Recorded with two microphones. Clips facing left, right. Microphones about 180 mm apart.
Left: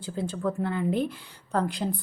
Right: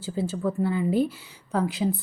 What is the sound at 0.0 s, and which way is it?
A woman's voice, 5° right (ahead or behind).